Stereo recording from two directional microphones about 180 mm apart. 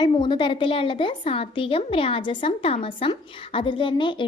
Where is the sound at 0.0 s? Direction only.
25° left (ahead or behind).